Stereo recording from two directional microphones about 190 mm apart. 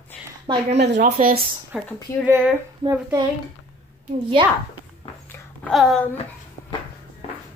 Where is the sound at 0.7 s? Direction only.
60° right (ahead or behind).